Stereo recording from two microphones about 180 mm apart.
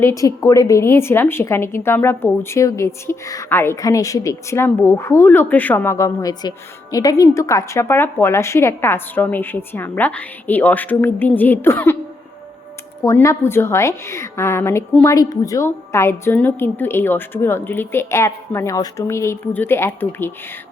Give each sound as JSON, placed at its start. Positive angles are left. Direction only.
{"t": 0.0, "sound": "a woman's voice", "side_deg": 20}
{"t": 13.0, "sound": "a woman's voice", "side_deg": 15}